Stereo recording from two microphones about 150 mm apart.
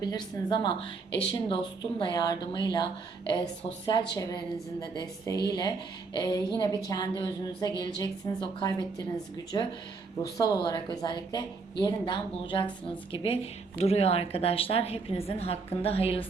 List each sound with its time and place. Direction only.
0.0 s a woman's voice: 30° left (ahead or behind)